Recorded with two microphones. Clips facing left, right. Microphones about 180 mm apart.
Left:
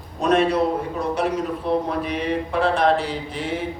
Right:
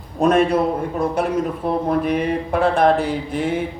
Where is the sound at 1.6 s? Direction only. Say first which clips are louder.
Right 3 dB; 50° right (ahead or behind).